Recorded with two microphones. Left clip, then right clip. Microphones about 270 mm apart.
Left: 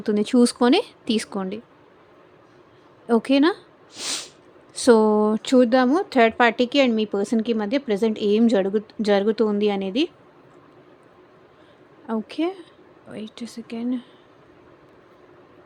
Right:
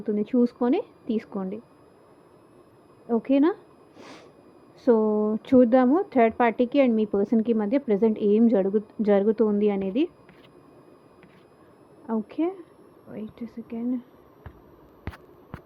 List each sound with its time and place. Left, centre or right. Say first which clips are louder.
0.0 s speech: left 5 dB; left
3.1 s speech: left 4 dB; left
5.4 s speech: right 2 dB; centre
12.0 s speech: left 2 dB; centre